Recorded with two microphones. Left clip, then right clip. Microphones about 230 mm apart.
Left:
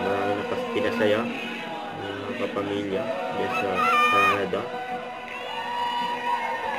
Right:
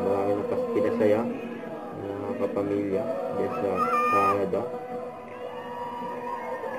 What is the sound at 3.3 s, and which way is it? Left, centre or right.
Speech, left.